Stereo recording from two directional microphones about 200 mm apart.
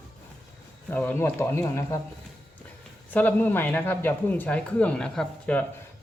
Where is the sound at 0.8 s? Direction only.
10° left (ahead or behind).